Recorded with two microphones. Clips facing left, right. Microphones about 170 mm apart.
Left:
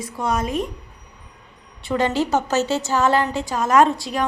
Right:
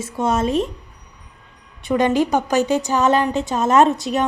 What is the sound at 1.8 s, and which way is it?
A woman's voice, 15° right (ahead or behind).